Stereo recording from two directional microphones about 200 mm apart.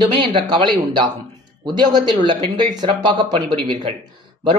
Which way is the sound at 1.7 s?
20° right (ahead or behind).